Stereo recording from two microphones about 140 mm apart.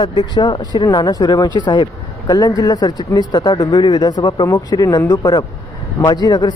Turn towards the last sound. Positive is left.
turn(degrees=30)  # may be behind; listen again after turning